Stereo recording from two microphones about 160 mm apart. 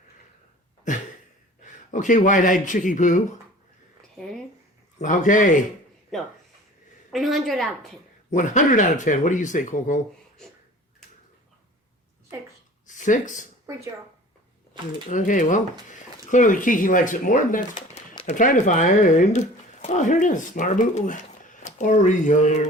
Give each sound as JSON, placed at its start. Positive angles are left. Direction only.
{"t": 1.6, "sound": "speech", "side_deg": 50}
{"t": 4.9, "sound": "speech", "side_deg": 55}
{"t": 6.1, "sound": "a woman's voice", "side_deg": 5}
{"t": 8.3, "sound": "speech", "side_deg": 50}
{"t": 12.9, "sound": "speech", "side_deg": 50}
{"t": 15.1, "sound": "speech", "side_deg": 50}